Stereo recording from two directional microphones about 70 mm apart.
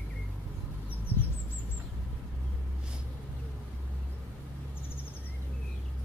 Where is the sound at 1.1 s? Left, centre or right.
Right.